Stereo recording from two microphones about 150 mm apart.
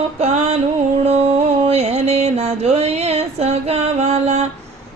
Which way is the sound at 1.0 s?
40° right (ahead or behind).